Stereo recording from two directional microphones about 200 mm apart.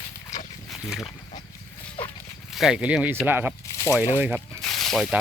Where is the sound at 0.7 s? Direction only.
Centre (ahead or behind).